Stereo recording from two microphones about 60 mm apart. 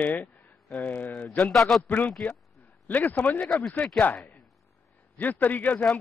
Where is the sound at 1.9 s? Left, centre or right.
Left.